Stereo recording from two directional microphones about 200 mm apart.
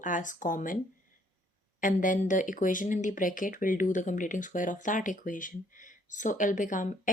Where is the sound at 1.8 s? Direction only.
40° left (ahead or behind).